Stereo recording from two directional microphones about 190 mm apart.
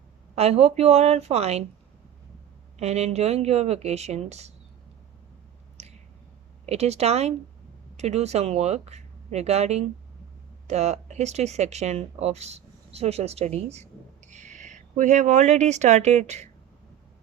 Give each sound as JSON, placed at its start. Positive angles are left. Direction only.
{"t": 0.3, "sound": "speech", "side_deg": -35}
{"t": 2.7, "sound": "speech", "side_deg": -35}
{"t": 6.7, "sound": "speech", "side_deg": -35}